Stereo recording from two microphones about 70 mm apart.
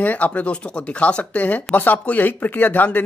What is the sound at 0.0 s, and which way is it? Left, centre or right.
Speech, left.